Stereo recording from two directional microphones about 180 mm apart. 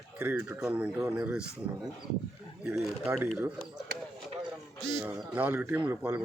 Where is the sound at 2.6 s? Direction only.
10° right (ahead or behind).